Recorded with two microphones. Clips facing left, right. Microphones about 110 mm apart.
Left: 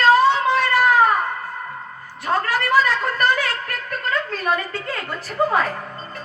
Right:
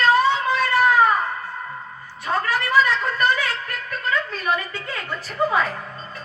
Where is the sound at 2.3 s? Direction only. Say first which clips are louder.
Left 2 dB; 35° left (ahead or behind).